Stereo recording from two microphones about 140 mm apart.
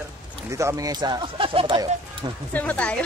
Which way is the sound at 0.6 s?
25° right (ahead or behind).